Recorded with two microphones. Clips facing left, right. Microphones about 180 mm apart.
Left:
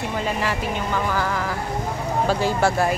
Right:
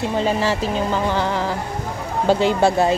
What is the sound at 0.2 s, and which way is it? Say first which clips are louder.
Speech: right 5 dB; 30° right (ahead or behind).